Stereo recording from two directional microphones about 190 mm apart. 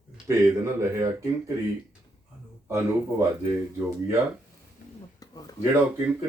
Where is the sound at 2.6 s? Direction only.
10° right (ahead or behind).